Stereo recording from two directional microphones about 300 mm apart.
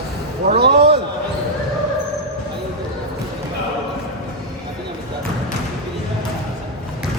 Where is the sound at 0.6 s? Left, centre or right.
Right.